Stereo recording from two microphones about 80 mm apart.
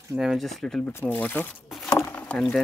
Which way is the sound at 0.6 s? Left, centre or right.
Centre.